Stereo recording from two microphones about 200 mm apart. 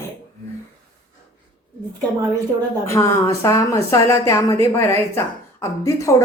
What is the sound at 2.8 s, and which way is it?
A woman's voice, 15° left (ahead or behind).